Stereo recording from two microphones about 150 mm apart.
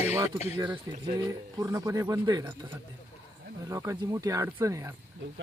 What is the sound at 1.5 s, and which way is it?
Speech, 20° right (ahead or behind).